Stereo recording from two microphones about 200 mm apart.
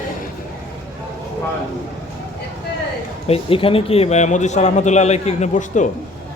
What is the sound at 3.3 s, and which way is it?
A man's voice, 30° left (ahead or behind).